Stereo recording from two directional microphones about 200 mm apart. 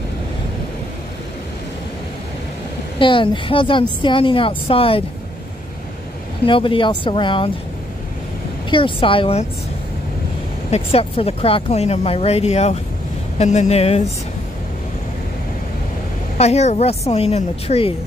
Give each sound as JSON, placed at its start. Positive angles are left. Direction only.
{"t": 3.0, "sound": "a woman's voice", "side_deg": 25}
{"t": 6.4, "sound": "a woman's voice", "side_deg": 25}
{"t": 8.6, "sound": "a woman's voice", "side_deg": 25}
{"t": 10.7, "sound": "speech", "side_deg": 30}
{"t": 16.3, "sound": "speech", "side_deg": 35}